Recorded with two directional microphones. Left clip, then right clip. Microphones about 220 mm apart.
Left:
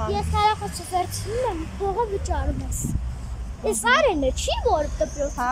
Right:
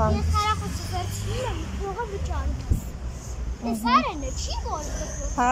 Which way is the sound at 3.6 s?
35° left (ahead or behind).